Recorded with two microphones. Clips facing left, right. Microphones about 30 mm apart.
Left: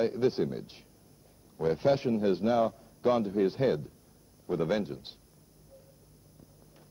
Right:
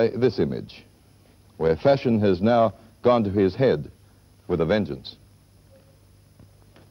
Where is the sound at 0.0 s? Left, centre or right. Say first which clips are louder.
Right 7 dB; right.